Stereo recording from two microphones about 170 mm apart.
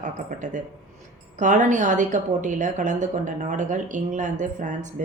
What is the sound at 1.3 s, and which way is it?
A woman's voice, 45° right (ahead or behind).